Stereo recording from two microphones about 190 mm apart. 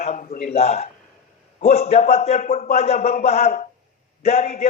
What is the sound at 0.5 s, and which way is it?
A man's voice, 35° left (ahead or behind).